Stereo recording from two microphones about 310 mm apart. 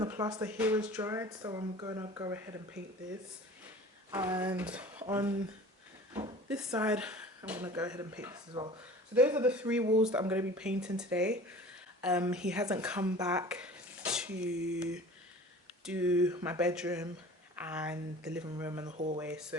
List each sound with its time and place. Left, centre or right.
0.0 s speech: centre
4.1 s speech: centre
6.1 s a sound: centre
6.7 s speech: centre
15.8 s speech: centre
18.9 s speech: right